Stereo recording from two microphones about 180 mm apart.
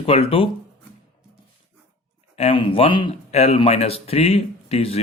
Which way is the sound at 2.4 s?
30° left (ahead or behind).